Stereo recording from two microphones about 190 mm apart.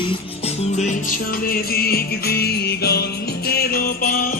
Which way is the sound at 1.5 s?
50° left (ahead or behind).